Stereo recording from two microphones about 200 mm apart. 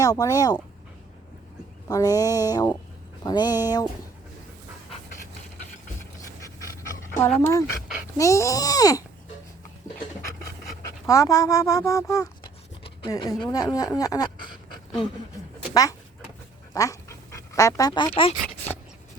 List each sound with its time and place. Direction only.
0.0 s speech: 15° left (ahead or behind)
1.9 s speech: 15° left (ahead or behind)
7.2 s speech: 10° left (ahead or behind)
11.0 s speech: 15° left (ahead or behind)
12.8 s a sound: 25° left (ahead or behind)
13.4 s speech: 20° left (ahead or behind)
15.7 s speech: 15° left (ahead or behind)
18.4 s dog: 10° left (ahead or behind)